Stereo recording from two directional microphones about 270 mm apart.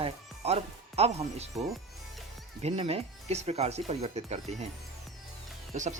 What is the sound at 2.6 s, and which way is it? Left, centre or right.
Speech, right.